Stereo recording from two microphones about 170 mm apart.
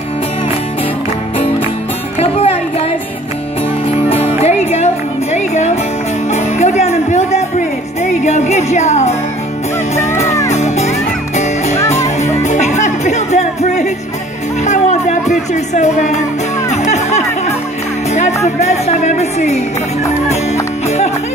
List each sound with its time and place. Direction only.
2.1 s music: 35° left (ahead or behind)
4.1 s music: 40° left (ahead or behind)